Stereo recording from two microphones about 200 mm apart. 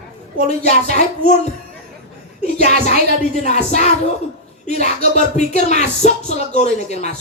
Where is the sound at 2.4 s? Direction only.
35° left (ahead or behind).